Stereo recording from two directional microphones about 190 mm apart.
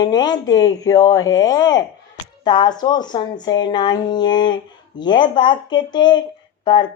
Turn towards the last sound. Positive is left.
turn(degrees=25)  # may be behind; listen again after turning